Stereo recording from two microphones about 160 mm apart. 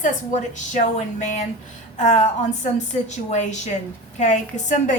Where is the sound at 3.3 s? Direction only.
45° left (ahead or behind).